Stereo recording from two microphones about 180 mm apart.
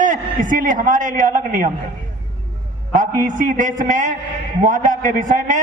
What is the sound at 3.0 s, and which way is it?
A man's voice, 50° right (ahead or behind).